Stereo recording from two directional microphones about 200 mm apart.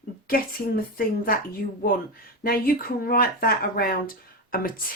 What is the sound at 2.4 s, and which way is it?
Speech, 45° left (ahead or behind).